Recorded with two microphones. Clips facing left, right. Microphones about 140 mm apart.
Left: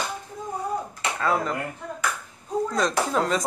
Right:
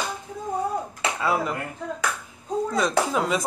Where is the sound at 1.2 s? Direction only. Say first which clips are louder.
Left 1 dB; 10° right (ahead or behind).